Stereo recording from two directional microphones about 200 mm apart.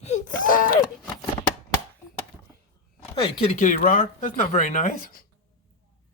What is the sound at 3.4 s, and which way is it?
A child's voice, 40° left (ahead or behind).